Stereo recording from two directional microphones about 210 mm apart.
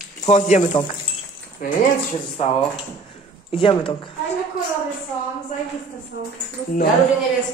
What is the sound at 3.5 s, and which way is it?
Speech, 25° left (ahead or behind).